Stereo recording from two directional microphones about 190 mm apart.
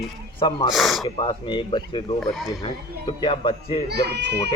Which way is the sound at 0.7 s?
Centre (ahead or behind).